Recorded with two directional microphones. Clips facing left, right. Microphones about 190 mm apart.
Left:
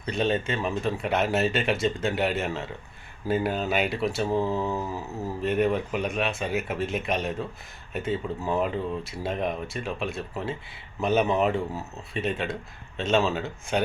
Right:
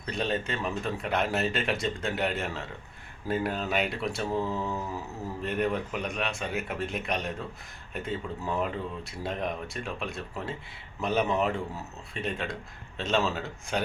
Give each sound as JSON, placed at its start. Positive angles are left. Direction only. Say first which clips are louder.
{"t": 0.0, "sound": "speech", "louder": "left 5 dB", "side_deg": 0}
{"t": 4.3, "sound": "mantra", "louder": "left 3 dB", "side_deg": 30}
{"t": 5.4, "sound": "speech", "louder": "left 5 dB", "side_deg": 5}